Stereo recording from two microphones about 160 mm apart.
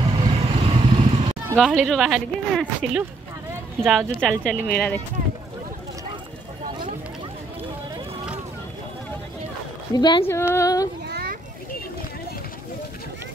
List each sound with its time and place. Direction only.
0.2 s vehicle: 35° right (ahead or behind)
1.6 s speech: centre (ahead or behind)
9.9 s speech: 30° left (ahead or behind)
10.2 s speech: 15° left (ahead or behind)
11.1 s children playing: 80° right